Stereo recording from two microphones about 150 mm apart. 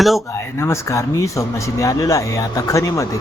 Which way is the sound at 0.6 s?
20° left (ahead or behind).